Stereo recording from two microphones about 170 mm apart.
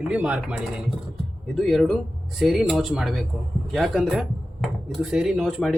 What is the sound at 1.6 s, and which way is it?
Speech, 5° left (ahead or behind).